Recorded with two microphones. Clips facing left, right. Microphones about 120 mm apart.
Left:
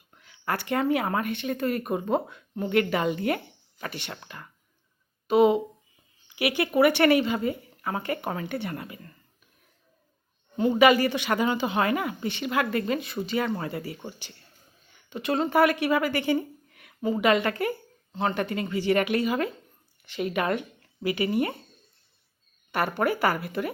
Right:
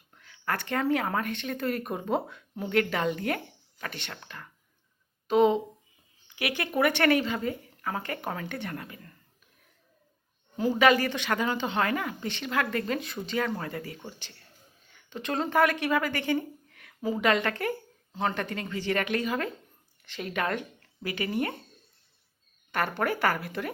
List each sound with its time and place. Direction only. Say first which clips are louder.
0.1 s speech: left 2 dB; 10° left (ahead or behind)
6.2 s a sound: left 6 dB; 10° left (ahead or behind)
6.6 s speech: left 5 dB; 5° left (ahead or behind)
10.8 s a woman's voice: left 3 dB; 10° left (ahead or behind)
17.0 s a woman's voice: left 3 dB; centre (ahead or behind)
22.7 s a woman's voice: left 3 dB; 5° left (ahead or behind)